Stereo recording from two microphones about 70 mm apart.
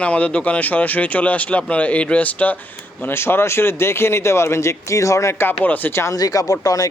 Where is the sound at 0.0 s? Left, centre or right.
Centre.